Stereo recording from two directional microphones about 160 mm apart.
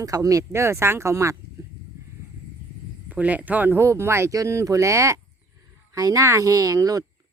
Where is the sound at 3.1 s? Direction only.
10° right (ahead or behind).